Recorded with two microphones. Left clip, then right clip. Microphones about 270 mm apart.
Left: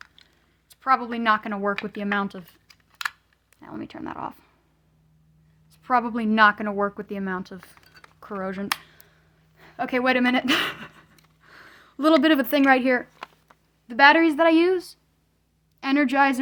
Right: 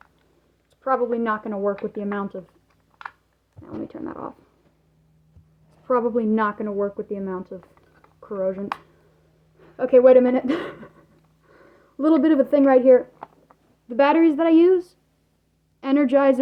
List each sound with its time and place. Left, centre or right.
0.7 s a woman's voice: left
1.9 s computer keyboard: left
3.6 s a woman's voice: left
5.8 s a woman's voice: left
11.5 s a sound: left
11.8 s a woman's voice: left